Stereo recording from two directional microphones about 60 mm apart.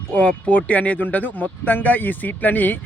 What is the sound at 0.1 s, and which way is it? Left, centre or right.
Speech, centre.